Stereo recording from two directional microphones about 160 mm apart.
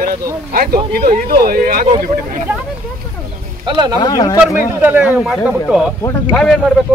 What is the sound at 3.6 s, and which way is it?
Speech, 30° right (ahead or behind).